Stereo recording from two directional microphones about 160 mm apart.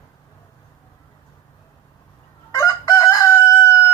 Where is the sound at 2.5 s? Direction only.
20° left (ahead or behind).